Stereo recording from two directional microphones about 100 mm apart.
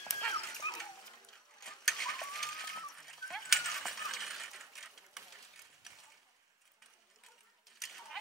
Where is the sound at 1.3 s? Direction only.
5° left (ahead or behind).